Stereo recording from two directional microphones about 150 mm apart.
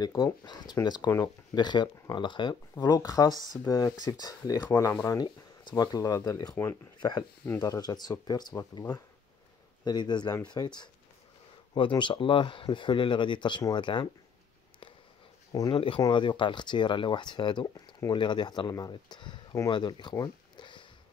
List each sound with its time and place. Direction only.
0.0 s speech: 25° left (ahead or behind)
2.7 s speech: 20° left (ahead or behind)
15.5 s speech: 25° left (ahead or behind)